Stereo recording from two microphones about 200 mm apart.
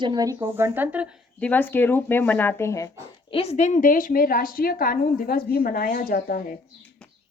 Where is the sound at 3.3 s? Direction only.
30° left (ahead or behind).